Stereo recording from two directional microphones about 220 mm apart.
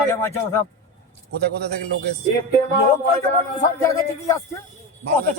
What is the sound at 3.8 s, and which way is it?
Speech, 15° left (ahead or behind).